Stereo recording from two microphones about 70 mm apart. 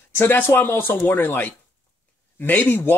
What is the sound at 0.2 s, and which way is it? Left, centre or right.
Speech, left.